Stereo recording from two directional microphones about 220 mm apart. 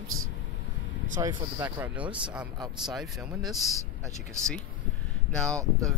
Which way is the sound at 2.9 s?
Centre (ahead or behind).